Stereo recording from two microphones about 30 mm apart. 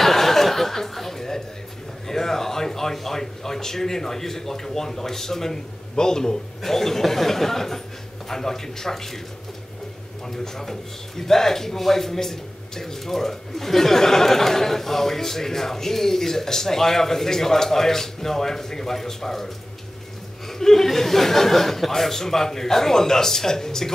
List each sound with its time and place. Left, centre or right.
0.0 s chuckle: centre
2.0 s a sound: centre
5.9 s a man's voice: left
6.6 s a man's voice: centre
10.2 s a man's voice: centre